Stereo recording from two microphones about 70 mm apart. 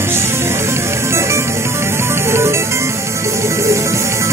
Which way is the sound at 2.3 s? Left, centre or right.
Right.